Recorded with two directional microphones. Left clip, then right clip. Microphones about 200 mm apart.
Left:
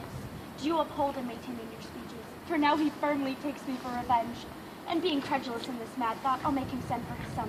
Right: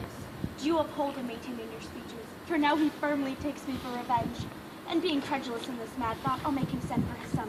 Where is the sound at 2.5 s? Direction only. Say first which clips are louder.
Even; centre (ahead or behind).